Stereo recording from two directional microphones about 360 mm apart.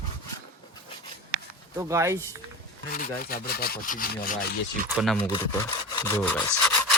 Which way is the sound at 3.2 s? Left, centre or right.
Left.